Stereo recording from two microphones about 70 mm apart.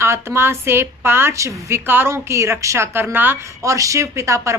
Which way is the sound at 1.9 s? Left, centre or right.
Right.